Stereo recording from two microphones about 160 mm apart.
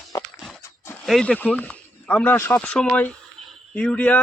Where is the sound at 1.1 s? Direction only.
5° left (ahead or behind).